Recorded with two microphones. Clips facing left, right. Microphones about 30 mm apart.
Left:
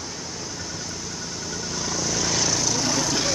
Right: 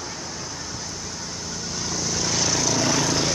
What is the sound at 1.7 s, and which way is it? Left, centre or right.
Vehicle, centre.